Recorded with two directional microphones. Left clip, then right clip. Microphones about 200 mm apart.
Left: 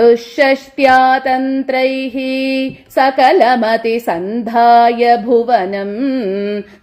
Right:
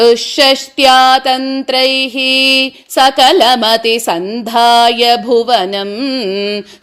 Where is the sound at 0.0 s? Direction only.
30° right (ahead or behind).